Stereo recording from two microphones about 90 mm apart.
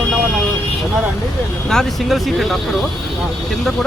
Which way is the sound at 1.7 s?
5° left (ahead or behind).